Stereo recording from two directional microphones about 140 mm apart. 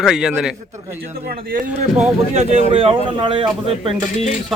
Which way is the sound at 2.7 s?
45° right (ahead or behind).